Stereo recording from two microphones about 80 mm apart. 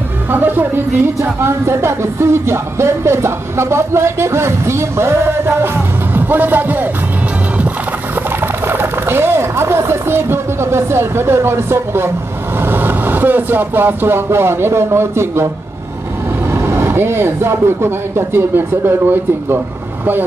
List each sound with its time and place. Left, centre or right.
0.3 s speech: right
1.4 s music: right
8.4 s speech: right
16.5 s speech: right